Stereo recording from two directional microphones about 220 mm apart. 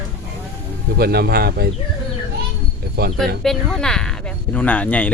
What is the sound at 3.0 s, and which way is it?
Speech, 45° right (ahead or behind).